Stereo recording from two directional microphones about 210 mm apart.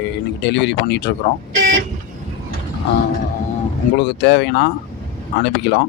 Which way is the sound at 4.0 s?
55° left (ahead or behind).